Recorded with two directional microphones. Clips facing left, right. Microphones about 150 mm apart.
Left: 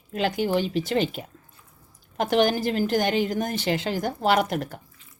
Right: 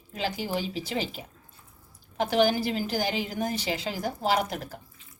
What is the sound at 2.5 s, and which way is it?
Speech, 45° left (ahead or behind).